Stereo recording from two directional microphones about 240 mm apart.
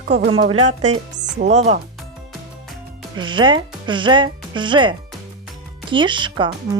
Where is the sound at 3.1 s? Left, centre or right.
Centre.